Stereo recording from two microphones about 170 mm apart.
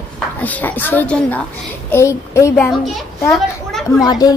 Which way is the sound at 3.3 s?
Centre (ahead or behind).